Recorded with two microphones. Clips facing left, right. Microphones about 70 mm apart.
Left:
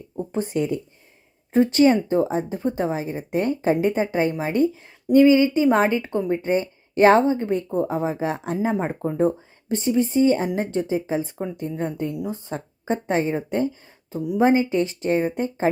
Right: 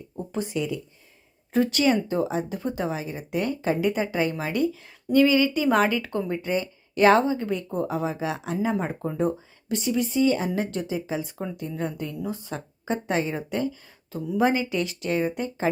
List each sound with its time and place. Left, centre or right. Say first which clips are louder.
0.2 s speech: left 4 dB; left
1.5 s speech: left 5 dB; left
8.7 s speech: left 3 dB; left